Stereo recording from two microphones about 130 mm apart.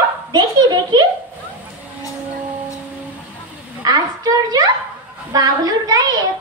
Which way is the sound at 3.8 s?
30° right (ahead or behind).